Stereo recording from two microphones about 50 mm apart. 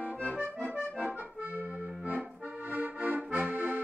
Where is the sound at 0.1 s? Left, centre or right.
Right.